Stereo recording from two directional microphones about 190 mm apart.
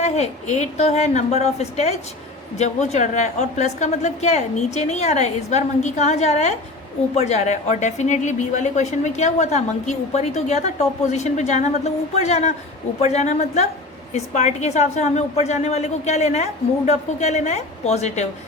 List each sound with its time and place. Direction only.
0.0 s a woman's voice: 35° left (ahead or behind)